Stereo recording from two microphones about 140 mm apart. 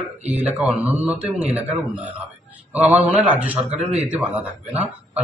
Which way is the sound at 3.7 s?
50° right (ahead or behind).